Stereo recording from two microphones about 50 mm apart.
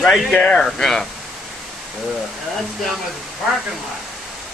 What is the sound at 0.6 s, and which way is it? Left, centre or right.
Speech, centre.